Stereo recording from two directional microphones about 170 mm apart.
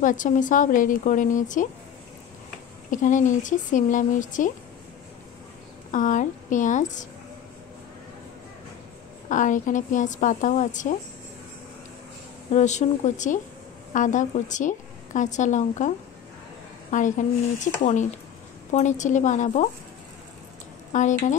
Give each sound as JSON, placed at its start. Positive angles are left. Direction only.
{"t": 0.0, "sound": "a woman's voice", "side_deg": 50}
{"t": 2.9, "sound": "a woman's voice", "side_deg": 50}
{"t": 5.9, "sound": "a woman's voice", "side_deg": 50}
{"t": 9.3, "sound": "a woman's voice", "side_deg": 50}
{"t": 12.5, "sound": "a woman's voice", "side_deg": 45}
{"t": 16.9, "sound": "a woman's voice", "side_deg": 50}
{"t": 18.7, "sound": "a woman's voice", "side_deg": 45}
{"t": 20.9, "sound": "a woman's voice", "side_deg": 45}